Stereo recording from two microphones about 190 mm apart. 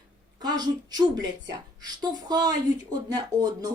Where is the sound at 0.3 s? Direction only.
20° right (ahead or behind).